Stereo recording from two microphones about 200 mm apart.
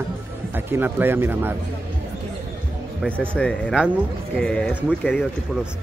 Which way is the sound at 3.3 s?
5° left (ahead or behind).